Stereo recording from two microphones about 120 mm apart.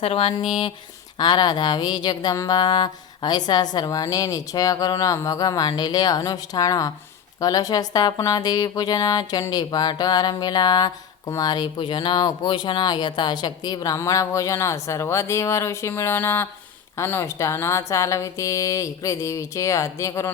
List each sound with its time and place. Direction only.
0.0 s speech: 50° left (ahead or behind); by 20.3 s 25° left (ahead or behind)